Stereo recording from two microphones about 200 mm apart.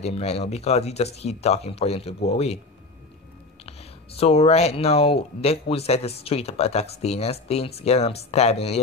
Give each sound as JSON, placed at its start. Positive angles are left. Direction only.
{"t": 0.0, "sound": "speech", "side_deg": 30}
{"t": 4.2, "sound": "speech", "side_deg": 30}